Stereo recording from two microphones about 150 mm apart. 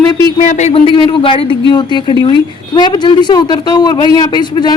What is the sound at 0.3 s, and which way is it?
Speech, 50° left (ahead or behind).